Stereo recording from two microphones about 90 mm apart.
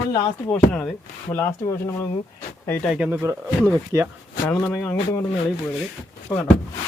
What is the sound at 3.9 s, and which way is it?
Speech, 35° right (ahead or behind).